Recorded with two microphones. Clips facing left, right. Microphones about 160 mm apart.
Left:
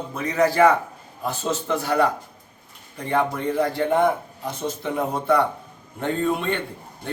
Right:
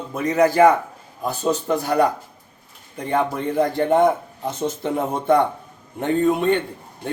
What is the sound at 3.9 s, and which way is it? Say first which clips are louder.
A man's voice: right 3 dB; 20° right (ahead or behind).